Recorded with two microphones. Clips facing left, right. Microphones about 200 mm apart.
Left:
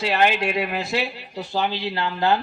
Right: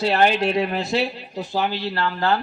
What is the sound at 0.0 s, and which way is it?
Speech, 35° right (ahead or behind).